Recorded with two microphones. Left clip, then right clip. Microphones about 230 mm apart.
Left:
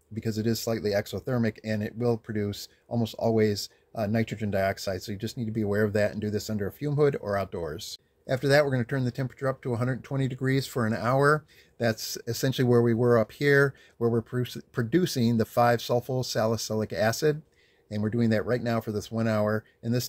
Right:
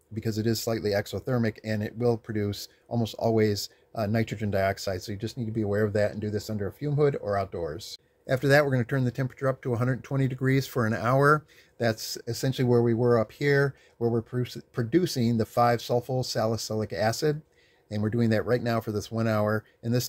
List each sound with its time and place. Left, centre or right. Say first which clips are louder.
0.1 s speech: right 1 dB; centre
8.3 s speech: right 1 dB; centre
12.3 s speech: left 1 dB; left
17.8 s speech: even; centre